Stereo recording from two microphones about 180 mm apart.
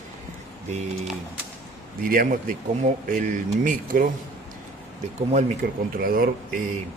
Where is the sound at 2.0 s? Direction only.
50° right (ahead or behind).